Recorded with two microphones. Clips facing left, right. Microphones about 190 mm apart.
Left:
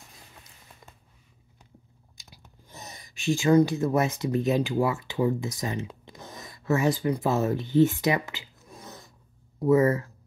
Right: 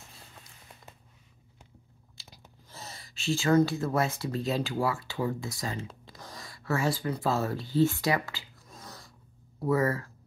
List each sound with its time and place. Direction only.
2.7 s speech: 20° left (ahead or behind)